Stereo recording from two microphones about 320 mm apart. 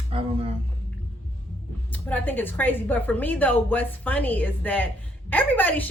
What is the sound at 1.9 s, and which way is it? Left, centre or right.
A woman's voice, centre.